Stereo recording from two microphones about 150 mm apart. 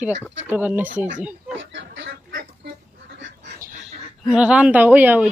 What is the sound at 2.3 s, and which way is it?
Duck, 80° right.